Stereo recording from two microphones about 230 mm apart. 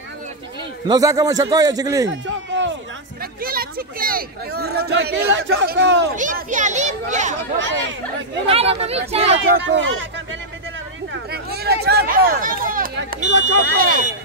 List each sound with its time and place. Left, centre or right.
0.8 s a man's voice: centre
2.0 s a sound: right
3.4 s speech: right
6.1 s speech: right
7.5 s speech: right
8.5 s speech: right
9.4 s speech: right
11.3 s a sound: right
13.3 s speech: right
13.7 s speech: right